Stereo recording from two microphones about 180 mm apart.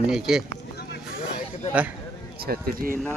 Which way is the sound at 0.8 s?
65° left (ahead or behind).